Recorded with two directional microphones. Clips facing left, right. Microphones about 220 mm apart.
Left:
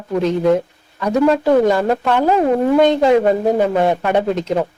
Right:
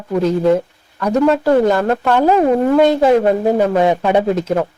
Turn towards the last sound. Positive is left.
turn(degrees=-5)  # may be behind; listen again after turning